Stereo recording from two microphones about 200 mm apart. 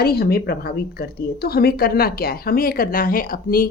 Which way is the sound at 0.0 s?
50° left (ahead or behind).